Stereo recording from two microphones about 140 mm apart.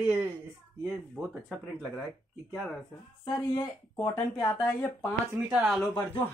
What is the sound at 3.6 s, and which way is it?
Speech, 30° left (ahead or behind).